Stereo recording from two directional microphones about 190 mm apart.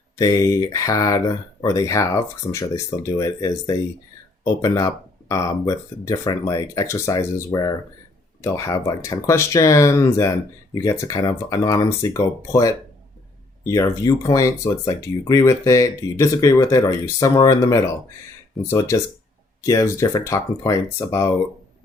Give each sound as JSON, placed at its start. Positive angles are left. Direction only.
{"t": 0.2, "sound": "speech", "side_deg": 20}